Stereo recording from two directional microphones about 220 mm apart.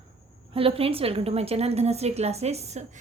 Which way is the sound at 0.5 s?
25° right (ahead or behind).